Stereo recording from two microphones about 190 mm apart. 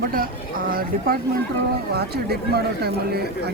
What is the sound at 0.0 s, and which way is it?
Speech, 50° right (ahead or behind).